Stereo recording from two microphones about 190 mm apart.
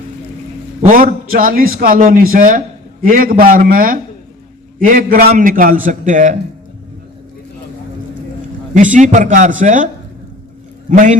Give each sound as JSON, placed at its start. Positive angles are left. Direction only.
{"t": 0.9, "sound": "a man's voice", "side_deg": -45}
{"t": 8.7, "sound": "a man's voice", "side_deg": -40}